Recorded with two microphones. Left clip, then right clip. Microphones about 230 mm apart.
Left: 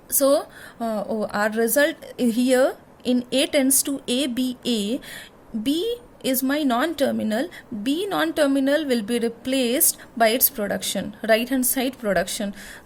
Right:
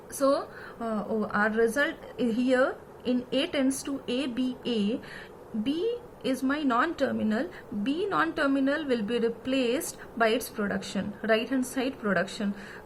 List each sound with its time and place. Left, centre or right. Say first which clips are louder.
0.2 s a woman's voice: left 6 dB; left
6.2 s a woman's voice: left 6 dB; left